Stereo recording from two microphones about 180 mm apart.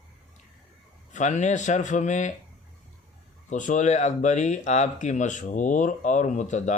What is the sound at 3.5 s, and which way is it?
Speech, 45° left (ahead or behind).